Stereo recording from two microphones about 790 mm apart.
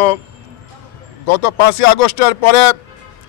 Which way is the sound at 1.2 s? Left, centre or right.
Left.